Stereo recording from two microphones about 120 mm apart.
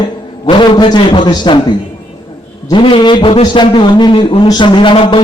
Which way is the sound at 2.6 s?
45° left (ahead or behind).